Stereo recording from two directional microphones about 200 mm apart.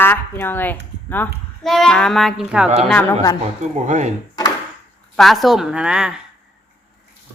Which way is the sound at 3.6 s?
35° right (ahead or behind).